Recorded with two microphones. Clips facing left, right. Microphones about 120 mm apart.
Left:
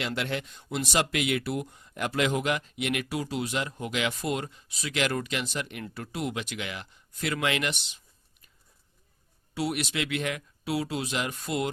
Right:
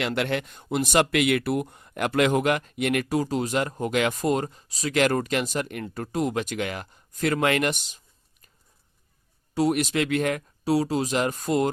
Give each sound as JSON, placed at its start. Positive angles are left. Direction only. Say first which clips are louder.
{"t": 0.0, "sound": "speech", "louder": "right 5 dB", "side_deg": -60}
{"t": 9.6, "sound": "speech", "louder": "right 7 dB", "side_deg": -40}